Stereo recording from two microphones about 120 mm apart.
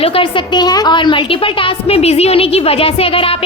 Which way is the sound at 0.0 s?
50° left (ahead or behind).